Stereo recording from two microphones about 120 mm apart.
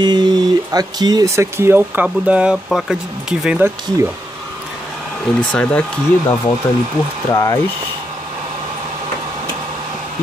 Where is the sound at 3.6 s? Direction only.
20° right (ahead or behind).